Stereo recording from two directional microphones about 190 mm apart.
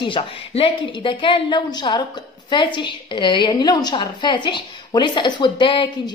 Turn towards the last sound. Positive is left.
turn(degrees=25)  # may be behind; listen again after turning